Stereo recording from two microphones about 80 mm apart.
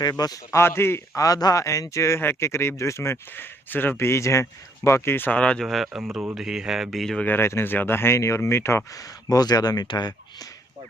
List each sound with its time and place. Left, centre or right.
0.0 s a man's voice: left
0.5 s speech: left
1.1 s speech: left
5.3 s speech: centre
5.6 s speech: centre
7.3 s speech: left
9.0 s speech: left